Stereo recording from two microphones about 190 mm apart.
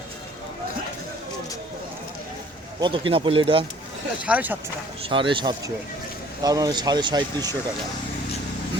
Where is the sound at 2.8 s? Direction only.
25° right (ahead or behind).